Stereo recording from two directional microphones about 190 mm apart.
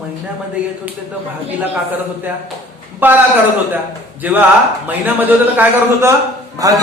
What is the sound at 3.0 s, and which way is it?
A man's voice, 10° right (ahead or behind).